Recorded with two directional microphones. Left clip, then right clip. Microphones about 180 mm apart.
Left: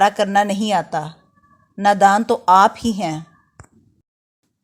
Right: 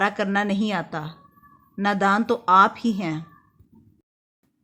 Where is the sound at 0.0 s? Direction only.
25° left (ahead or behind).